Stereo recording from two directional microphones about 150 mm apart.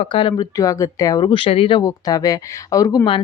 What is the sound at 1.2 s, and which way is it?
Speech, 35° left (ahead or behind).